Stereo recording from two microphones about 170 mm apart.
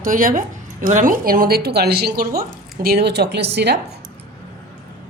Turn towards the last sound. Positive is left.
turn(degrees=-75)  # may be behind; listen again after turning